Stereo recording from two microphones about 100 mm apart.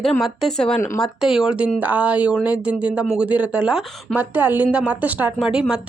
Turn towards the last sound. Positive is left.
turn(degrees=-10)  # may be behind; listen again after turning